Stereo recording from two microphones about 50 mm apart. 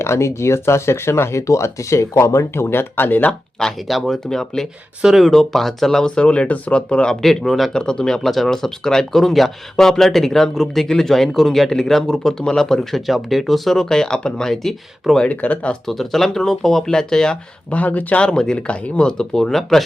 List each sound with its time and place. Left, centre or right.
0.0 s speech: left
2.6 s speech: left
3.8 s speech: centre
6.1 s speech: centre
7.7 s speech: centre
15.2 s speech: left
15.9 s speech: centre
17.7 s speech: left
18.2 s speech: centre